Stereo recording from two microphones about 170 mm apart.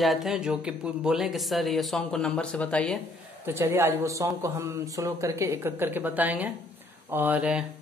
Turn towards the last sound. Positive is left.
turn(degrees=-5)  # may be behind; listen again after turning